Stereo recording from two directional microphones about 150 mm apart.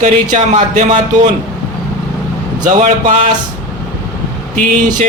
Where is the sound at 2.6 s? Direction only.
50° right (ahead or behind).